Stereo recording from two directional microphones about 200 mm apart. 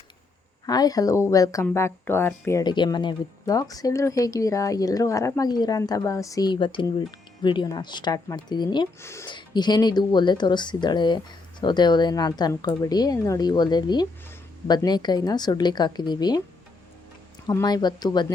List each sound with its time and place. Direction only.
0.6 s speech: 20° left (ahead or behind)
17.4 s speech: 20° left (ahead or behind)